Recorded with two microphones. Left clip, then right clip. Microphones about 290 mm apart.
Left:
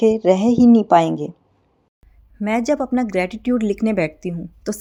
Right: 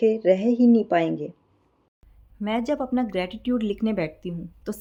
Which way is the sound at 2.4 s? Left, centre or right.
Left.